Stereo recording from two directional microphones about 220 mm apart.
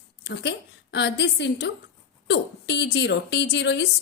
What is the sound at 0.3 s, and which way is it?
A woman's voice, 50° left (ahead or behind).